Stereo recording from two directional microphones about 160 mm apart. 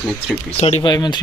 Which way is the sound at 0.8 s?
25° left (ahead or behind).